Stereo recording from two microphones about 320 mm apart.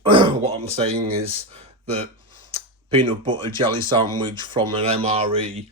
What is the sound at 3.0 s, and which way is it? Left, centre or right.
Speech, centre.